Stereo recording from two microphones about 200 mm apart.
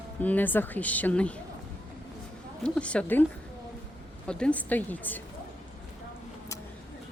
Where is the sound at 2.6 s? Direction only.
5° left (ahead or behind).